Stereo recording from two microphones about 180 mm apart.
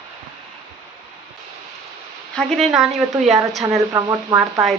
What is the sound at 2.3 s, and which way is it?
Speech, centre (ahead or behind).